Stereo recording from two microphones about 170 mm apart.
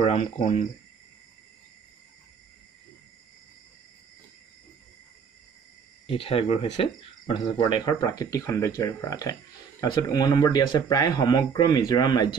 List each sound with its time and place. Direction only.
0.0 s speech: 35° left (ahead or behind)
6.0 s speech: 35° left (ahead or behind)